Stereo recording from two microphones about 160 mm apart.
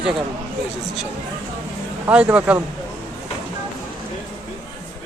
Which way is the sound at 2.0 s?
10° right (ahead or behind).